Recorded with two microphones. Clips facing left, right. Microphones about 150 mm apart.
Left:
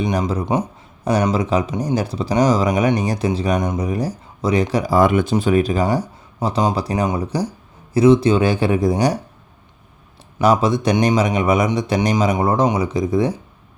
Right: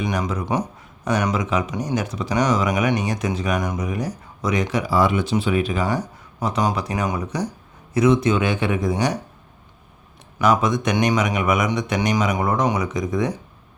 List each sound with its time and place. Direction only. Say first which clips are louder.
0.0 s speech: left 4 dB; 30° left (ahead or behind)
6.4 s speech: left 3 dB; 30° left (ahead or behind)
10.4 s speech: left 3 dB; 30° left (ahead or behind)